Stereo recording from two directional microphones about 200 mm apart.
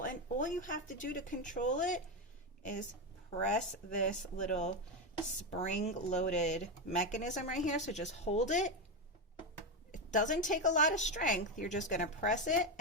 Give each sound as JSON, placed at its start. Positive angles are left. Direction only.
{"t": 0.0, "sound": "speech", "side_deg": 40}
{"t": 3.4, "sound": "a woman's voice", "side_deg": 40}
{"t": 9.9, "sound": "a woman's voice", "side_deg": 40}